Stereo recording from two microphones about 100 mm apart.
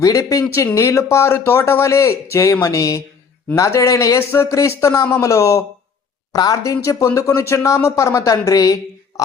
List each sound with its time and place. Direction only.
0.0 s speech: 35° left (ahead or behind)